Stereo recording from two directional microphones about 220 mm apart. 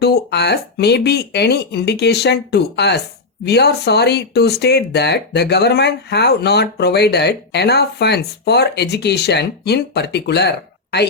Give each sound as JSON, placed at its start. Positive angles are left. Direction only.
{"t": 0.0, "sound": "speech", "side_deg": 50}